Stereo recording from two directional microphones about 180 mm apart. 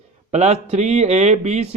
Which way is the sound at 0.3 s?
40° right (ahead or behind).